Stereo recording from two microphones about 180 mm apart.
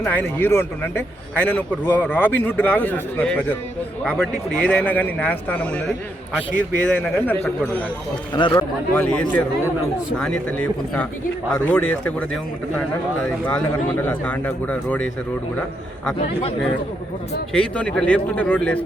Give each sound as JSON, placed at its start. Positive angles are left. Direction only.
{"t": 0.0, "sound": "a man's voice", "side_deg": 10}
{"t": 6.9, "sound": "a man's voice", "side_deg": 10}
{"t": 8.4, "sound": "speech", "side_deg": 25}
{"t": 9.0, "sound": "a man's voice", "side_deg": 10}
{"t": 17.5, "sound": "a man's voice", "side_deg": 5}